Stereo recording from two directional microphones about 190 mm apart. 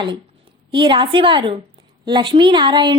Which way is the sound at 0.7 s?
25° right (ahead or behind).